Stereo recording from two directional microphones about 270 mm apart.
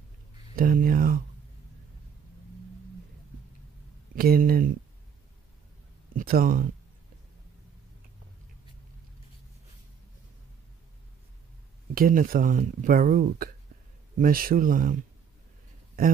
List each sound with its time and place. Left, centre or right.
0.6 s speech: right
4.1 s speech: right
6.1 s speech: right
11.9 s speech: right
16.0 s speech: right